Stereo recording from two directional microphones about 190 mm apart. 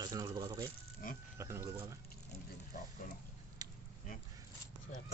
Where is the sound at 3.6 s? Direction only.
20° right (ahead or behind).